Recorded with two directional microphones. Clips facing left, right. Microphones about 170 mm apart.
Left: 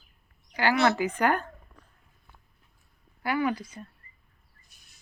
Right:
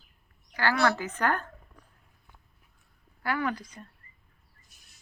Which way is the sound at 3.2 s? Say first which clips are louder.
Left 3 dB; 15° left (ahead or behind).